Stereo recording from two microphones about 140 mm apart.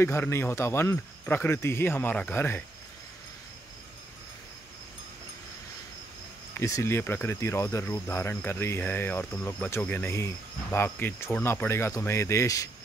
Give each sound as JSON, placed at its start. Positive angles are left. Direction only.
{"t": 0.0, "sound": "speech", "side_deg": 20}
{"t": 1.2, "sound": "cricket", "side_deg": 15}
{"t": 6.5, "sound": "cricket", "side_deg": 20}